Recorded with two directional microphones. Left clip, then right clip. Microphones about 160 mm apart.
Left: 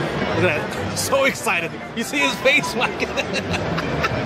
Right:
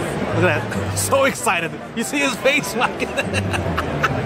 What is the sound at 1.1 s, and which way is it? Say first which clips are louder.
Speech: right 2 dB; 20° right (ahead or behind).